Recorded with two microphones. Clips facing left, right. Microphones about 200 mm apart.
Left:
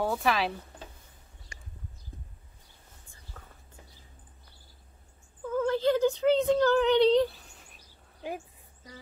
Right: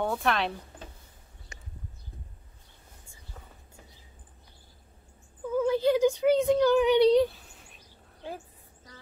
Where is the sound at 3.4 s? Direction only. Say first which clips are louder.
Right 1 dB; 10° right (ahead or behind).